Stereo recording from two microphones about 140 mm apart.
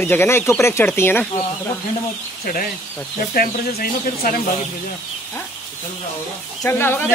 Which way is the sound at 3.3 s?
80° left.